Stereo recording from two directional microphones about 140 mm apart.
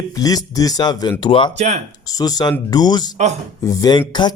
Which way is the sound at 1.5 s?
55° right (ahead or behind).